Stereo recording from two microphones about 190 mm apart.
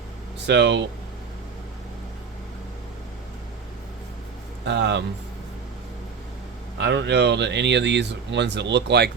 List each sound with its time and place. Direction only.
0.4 s speech: 65° right (ahead or behind)
4.6 s speech: 65° right (ahead or behind)
6.7 s speech: 65° right (ahead or behind)